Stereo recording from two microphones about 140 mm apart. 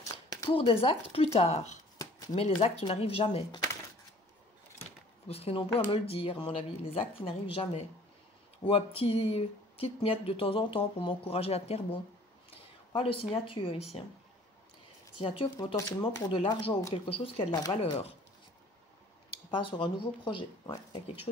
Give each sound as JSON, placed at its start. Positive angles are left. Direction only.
{"t": 0.3, "sound": "a sound", "side_deg": 35}
{"t": 0.8, "sound": "speech", "side_deg": 45}
{"t": 2.0, "sound": "shuffling cards", "side_deg": 25}
{"t": 2.3, "sound": "speech", "side_deg": 50}
{"t": 5.3, "sound": "speech", "side_deg": 45}
{"t": 15.1, "sound": "speech", "side_deg": 35}
{"t": 19.3, "sound": "speech", "side_deg": 40}